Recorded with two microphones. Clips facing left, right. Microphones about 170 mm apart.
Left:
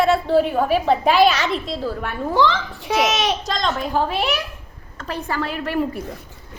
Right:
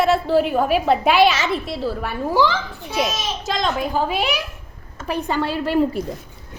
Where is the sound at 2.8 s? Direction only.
85° left.